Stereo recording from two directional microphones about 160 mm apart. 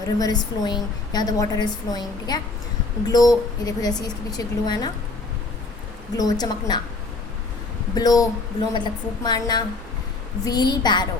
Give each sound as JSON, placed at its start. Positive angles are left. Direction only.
{"t": 0.2, "sound": "a woman's voice", "side_deg": 25}
{"t": 6.1, "sound": "a woman's voice", "side_deg": 25}
{"t": 7.9, "sound": "a woman's voice", "side_deg": 25}